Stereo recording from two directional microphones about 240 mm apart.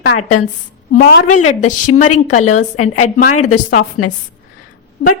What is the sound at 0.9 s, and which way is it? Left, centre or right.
Speech, left.